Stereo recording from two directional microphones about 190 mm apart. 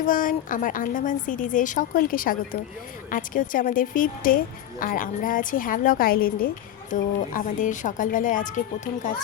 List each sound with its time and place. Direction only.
0.0 s a woman's voice: 45° left (ahead or behind)